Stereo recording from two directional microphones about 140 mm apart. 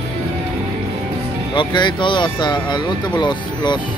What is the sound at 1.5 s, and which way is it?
Speech, 35° left (ahead or behind).